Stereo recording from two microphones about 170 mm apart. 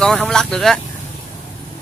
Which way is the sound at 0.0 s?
5° left (ahead or behind).